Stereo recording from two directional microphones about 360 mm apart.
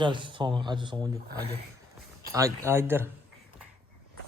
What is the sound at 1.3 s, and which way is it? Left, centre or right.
Speech, right.